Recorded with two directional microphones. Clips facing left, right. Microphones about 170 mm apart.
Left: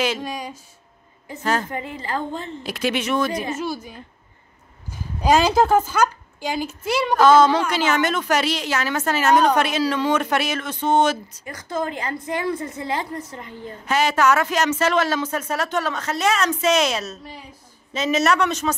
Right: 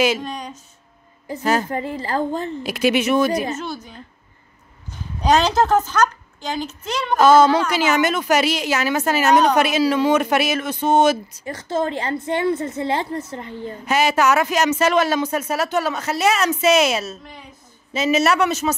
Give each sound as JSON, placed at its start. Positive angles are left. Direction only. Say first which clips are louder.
{"t": 0.2, "sound": "a woman's voice", "louder": "even", "side_deg": 5}
{"t": 1.4, "sound": "speech", "louder": "right 3 dB", "side_deg": -10}
{"t": 1.7, "sound": "a woman's voice", "louder": "right 4 dB", "side_deg": -35}
{"t": 2.6, "sound": "speech", "louder": "right 5 dB", "side_deg": -10}
{"t": 3.5, "sound": "a woman's voice", "louder": "left 2 dB", "side_deg": 5}
{"t": 5.2, "sound": "a woman's voice", "louder": "even", "side_deg": 5}
{"t": 7.2, "sound": "speech", "louder": "right 2 dB", "side_deg": -10}
{"t": 11.4, "sound": "a woman's voice", "louder": "right 4 dB", "side_deg": -30}
{"t": 13.8, "sound": "speech", "louder": "right 1 dB", "side_deg": -10}